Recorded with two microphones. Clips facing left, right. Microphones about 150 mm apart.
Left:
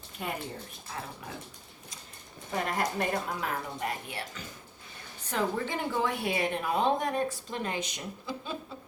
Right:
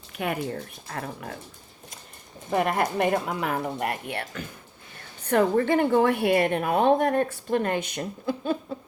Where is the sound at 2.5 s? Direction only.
60° right (ahead or behind).